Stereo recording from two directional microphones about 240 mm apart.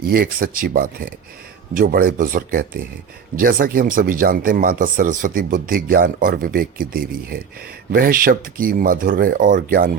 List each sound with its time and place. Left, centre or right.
0.0 s speech: right